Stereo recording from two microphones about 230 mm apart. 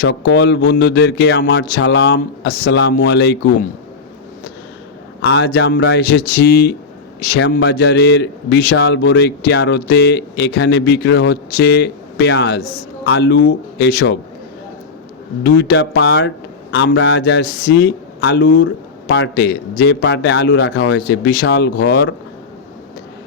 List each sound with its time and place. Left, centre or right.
0.0 s a man's voice: left
5.2 s a man's voice: left
15.4 s a man's voice: left